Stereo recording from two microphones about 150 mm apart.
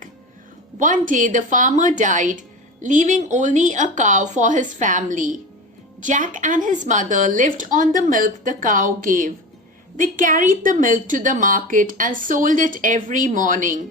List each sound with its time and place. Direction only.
0.8 s a woman's voice: 60° right (ahead or behind)